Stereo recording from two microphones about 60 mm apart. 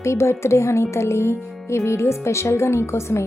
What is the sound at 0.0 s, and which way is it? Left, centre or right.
A woman's voice, left.